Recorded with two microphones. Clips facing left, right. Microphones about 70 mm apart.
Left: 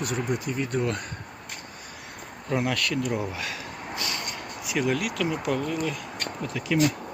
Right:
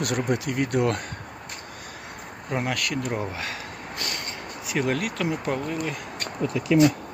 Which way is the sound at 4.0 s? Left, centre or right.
Right.